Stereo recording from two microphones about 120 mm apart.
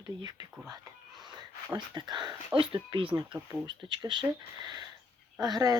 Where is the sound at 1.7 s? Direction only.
40° right (ahead or behind).